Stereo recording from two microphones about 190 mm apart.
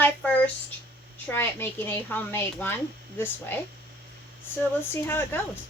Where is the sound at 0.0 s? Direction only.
5° left (ahead or behind).